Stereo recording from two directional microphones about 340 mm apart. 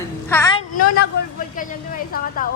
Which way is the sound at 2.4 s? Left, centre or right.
Left.